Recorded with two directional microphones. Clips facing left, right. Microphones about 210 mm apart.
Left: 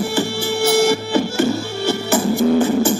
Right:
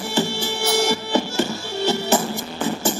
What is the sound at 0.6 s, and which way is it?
Music, 55° left (ahead or behind).